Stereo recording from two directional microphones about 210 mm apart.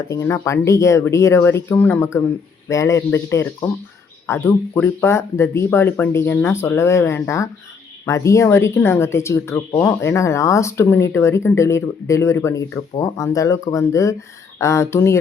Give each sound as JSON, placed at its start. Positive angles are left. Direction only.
{"t": 0.1, "sound": "speech", "side_deg": 15}